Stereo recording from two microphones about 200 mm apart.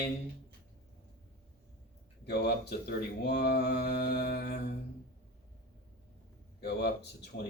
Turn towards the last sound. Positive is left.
turn(degrees=55)  # may be behind; listen again after turning